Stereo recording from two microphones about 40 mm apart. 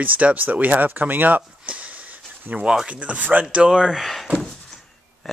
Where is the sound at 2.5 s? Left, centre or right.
Right.